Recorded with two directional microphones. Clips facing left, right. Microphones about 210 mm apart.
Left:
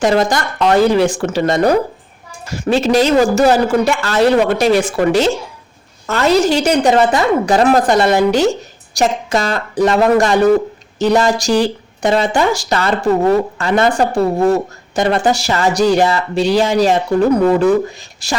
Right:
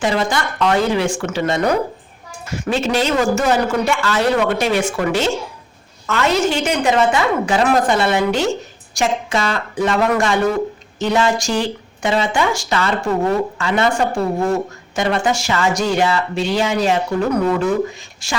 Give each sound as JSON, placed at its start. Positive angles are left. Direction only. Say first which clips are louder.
{"t": 0.0, "sound": "speech", "louder": "left 5 dB", "side_deg": 40}